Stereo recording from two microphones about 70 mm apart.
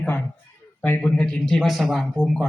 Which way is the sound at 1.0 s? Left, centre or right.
Centre.